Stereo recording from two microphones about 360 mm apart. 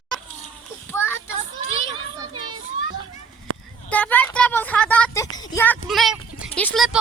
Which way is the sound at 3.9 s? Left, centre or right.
Centre.